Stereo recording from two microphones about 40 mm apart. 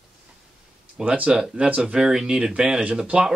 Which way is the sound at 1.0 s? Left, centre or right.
Right.